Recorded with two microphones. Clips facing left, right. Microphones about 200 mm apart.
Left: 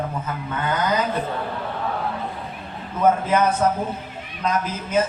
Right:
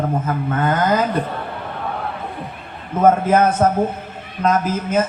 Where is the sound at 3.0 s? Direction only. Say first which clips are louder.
Right 5 dB; 50° right (ahead or behind).